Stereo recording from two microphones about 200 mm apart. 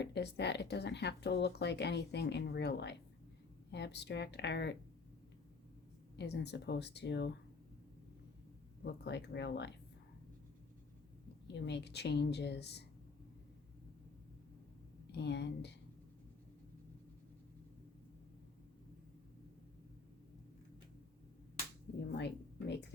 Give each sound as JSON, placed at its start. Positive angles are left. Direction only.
{"t": 0.0, "sound": "speech", "side_deg": 60}
{"t": 6.1, "sound": "speech", "side_deg": 60}
{"t": 8.8, "sound": "speech", "side_deg": 60}
{"t": 11.5, "sound": "speech", "side_deg": 60}
{"t": 15.1, "sound": "speech", "side_deg": 60}
{"t": 22.1, "sound": "speech", "side_deg": 60}